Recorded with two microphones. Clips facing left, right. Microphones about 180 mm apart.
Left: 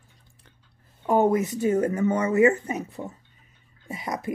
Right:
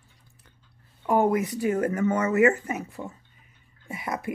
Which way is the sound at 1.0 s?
20° left (ahead or behind).